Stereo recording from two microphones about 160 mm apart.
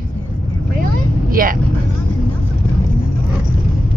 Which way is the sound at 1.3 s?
60° right (ahead or behind).